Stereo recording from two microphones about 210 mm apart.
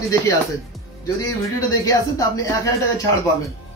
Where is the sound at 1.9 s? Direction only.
15° left (ahead or behind).